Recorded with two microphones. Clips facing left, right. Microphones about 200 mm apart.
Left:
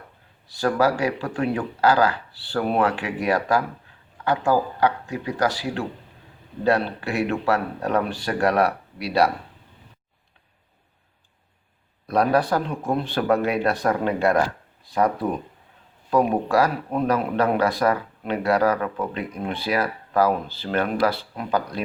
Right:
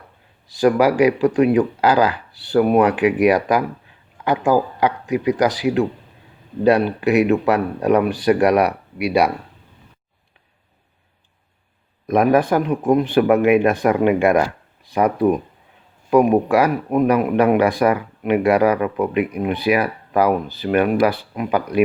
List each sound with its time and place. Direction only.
0.5 s speech: 20° right (ahead or behind)
12.0 s speech: 15° right (ahead or behind)